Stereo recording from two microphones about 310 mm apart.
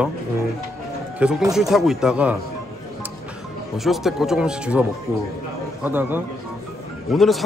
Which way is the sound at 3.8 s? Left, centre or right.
Centre.